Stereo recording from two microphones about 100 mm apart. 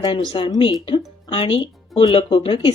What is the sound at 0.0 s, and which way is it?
A woman's voice, 55° left (ahead or behind).